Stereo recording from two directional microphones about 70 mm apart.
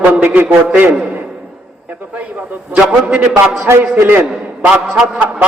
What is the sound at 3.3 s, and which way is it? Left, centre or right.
A man's voice, right.